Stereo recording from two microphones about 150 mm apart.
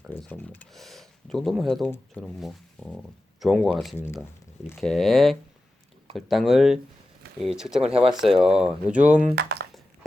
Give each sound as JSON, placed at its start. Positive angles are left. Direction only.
{"t": 0.2, "sound": "speech", "side_deg": 10}
{"t": 3.9, "sound": "speech", "side_deg": 15}
{"t": 4.7, "sound": "speech", "side_deg": 0}
{"t": 9.3, "sound": "speech", "side_deg": -90}